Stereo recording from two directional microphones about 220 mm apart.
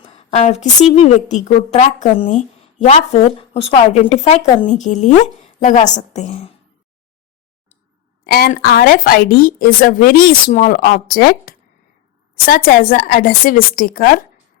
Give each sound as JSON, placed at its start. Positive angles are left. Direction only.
{"t": 0.0, "sound": "a woman's voice", "side_deg": 30}
{"t": 8.2, "sound": "a woman's voice", "side_deg": 45}